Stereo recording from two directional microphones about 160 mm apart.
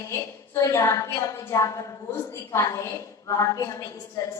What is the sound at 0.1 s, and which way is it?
A woman's voice, 20° left (ahead or behind).